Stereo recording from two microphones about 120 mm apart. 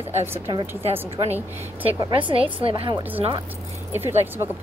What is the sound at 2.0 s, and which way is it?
Speech, 45° right (ahead or behind).